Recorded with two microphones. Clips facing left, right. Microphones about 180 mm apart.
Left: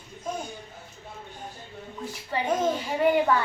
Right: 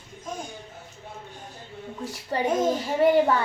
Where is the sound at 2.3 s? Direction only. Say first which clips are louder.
Right 3 dB; 40° right (ahead or behind).